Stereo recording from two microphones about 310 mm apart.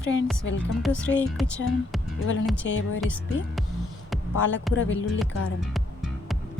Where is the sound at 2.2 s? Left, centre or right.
Left.